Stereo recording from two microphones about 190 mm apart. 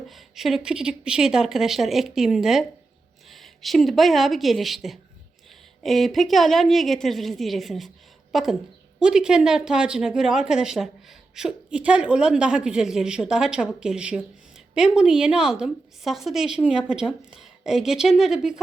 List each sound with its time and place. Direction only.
0.1 s a woman's voice: centre (ahead or behind)